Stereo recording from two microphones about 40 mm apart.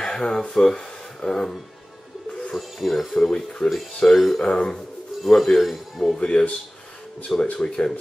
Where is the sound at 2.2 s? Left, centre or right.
Left.